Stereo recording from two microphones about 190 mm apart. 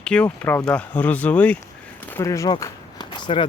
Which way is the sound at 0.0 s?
5° left (ahead or behind).